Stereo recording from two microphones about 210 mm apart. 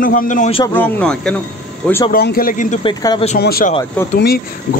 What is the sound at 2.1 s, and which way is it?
Speech, 45° left (ahead or behind).